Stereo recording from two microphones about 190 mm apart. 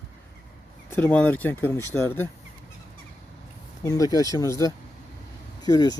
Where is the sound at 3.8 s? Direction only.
20° left (ahead or behind).